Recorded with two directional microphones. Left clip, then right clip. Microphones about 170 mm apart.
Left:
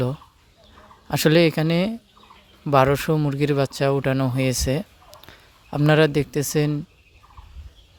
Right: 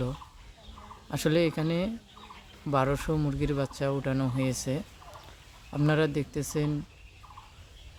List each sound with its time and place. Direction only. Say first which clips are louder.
1.0 s speech: left 9 dB; 55° left (ahead or behind)